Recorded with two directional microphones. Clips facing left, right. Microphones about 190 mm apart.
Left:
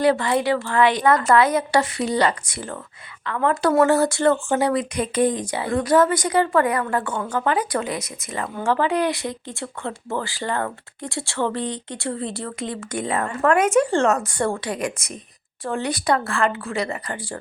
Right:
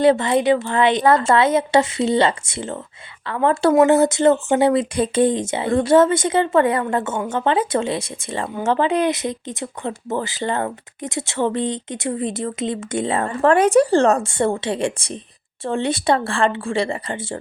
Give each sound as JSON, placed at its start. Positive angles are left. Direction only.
{"t": 0.0, "sound": "speech", "side_deg": -20}